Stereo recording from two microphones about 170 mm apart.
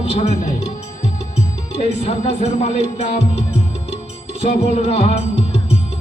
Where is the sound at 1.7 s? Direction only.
35° left (ahead or behind).